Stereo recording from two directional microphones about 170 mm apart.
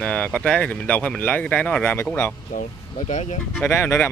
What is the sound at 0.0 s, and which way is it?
Speech, 5° left (ahead or behind).